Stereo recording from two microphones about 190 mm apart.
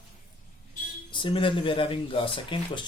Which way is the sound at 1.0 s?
25° left (ahead or behind).